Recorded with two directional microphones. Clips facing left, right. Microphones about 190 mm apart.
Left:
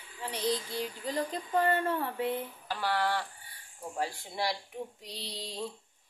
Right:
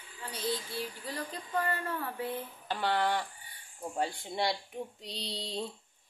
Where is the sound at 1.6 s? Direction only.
25° left (ahead or behind).